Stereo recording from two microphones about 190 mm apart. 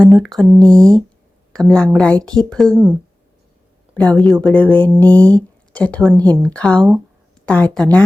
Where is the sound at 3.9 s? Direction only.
5° left (ahead or behind).